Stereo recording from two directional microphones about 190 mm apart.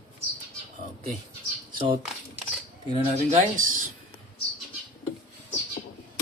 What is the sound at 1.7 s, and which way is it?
Speech, 25° right (ahead or behind).